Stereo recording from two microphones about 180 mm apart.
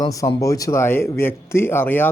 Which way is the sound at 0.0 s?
20° left (ahead or behind).